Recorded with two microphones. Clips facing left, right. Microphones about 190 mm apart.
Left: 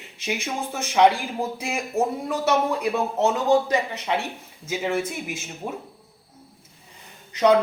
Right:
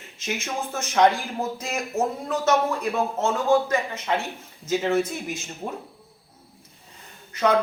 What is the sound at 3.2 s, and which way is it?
A woman's voice, 15° left (ahead or behind).